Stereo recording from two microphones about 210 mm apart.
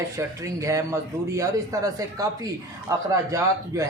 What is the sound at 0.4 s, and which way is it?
Speech, 15° right (ahead or behind).